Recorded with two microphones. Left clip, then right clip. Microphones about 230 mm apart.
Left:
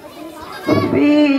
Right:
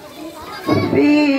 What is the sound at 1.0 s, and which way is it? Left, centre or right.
Music, left.